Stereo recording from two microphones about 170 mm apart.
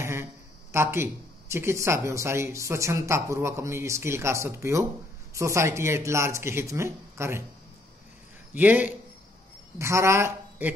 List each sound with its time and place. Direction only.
0.0 s speech: 15° right (ahead or behind)
8.5 s a woman's voice: 10° right (ahead or behind)